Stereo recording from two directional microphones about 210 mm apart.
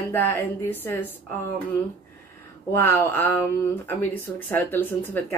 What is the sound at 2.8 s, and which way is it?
Speech, 10° left (ahead or behind).